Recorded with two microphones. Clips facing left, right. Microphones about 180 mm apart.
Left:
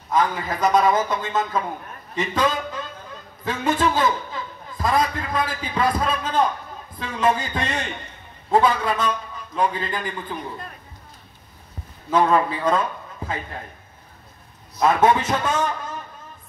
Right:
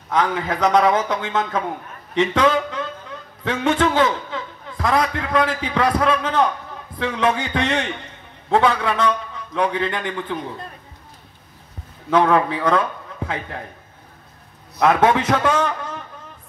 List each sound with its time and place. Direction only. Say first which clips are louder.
0.1 s a man's voice: right 1 dB; 75° right (ahead or behind)
12.1 s a man's voice: right 2 dB; 75° right (ahead or behind)
14.8 s a man's voice: right 1 dB; 75° right (ahead or behind)